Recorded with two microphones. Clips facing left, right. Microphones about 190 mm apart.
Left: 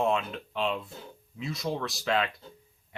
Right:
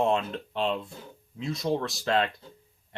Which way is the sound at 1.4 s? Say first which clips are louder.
Right 3 dB; centre (ahead or behind).